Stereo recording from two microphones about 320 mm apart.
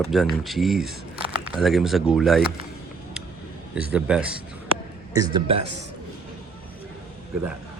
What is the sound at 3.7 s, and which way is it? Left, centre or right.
Speech, centre.